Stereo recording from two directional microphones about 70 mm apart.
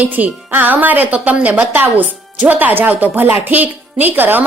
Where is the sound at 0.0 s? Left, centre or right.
Right.